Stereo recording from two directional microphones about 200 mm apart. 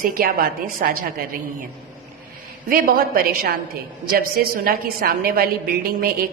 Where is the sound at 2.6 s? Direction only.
45° right (ahead or behind).